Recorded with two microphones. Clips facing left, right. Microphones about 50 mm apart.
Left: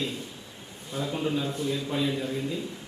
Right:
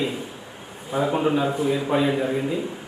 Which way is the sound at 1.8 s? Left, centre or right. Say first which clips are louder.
Right 7 dB; right.